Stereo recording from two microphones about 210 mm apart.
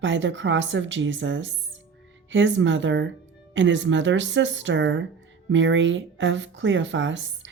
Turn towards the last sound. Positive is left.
turn(degrees=-60)  # may be behind; listen again after turning